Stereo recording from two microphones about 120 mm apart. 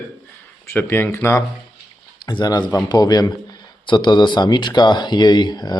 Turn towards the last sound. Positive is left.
turn(degrees=35)  # may be behind; listen again after turning